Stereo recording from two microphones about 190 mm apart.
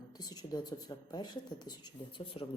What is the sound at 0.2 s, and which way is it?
Speech, 20° left (ahead or behind).